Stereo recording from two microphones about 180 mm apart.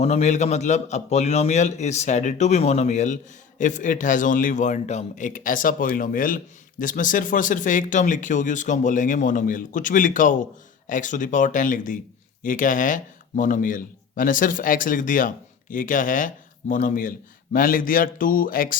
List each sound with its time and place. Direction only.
0.0 s a man's voice: 35° left (ahead or behind)